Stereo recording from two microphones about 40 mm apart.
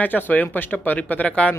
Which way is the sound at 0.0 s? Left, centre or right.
Left.